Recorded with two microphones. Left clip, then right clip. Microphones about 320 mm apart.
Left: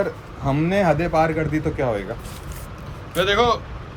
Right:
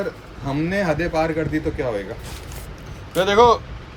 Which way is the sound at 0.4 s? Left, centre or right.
Centre.